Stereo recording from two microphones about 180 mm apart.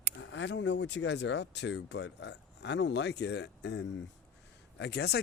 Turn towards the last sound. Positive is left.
turn(degrees=65)  # may be behind; listen again after turning